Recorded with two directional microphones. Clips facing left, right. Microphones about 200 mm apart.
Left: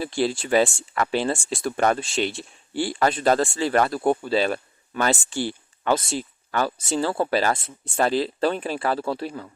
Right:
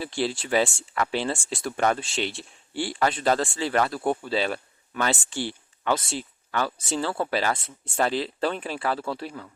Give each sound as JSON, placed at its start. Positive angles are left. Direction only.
{"t": 0.0, "sound": "speech", "side_deg": 45}